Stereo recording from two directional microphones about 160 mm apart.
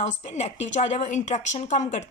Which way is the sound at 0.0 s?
45° left (ahead or behind).